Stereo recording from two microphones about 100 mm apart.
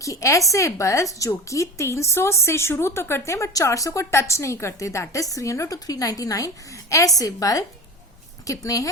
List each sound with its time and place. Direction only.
0.0 s speech: 30° left (ahead or behind)